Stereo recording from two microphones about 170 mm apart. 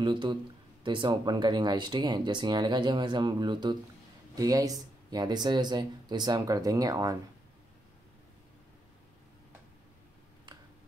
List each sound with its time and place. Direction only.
0.0 s speech: 25° right (ahead or behind)